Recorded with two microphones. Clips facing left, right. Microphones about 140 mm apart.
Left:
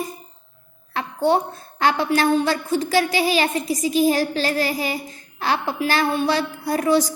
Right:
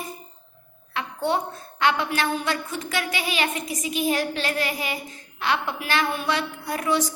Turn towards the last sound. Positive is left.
turn(degrees=35)  # may be behind; listen again after turning